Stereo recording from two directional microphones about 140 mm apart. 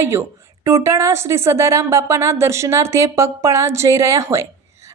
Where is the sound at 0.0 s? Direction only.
20° right (ahead or behind).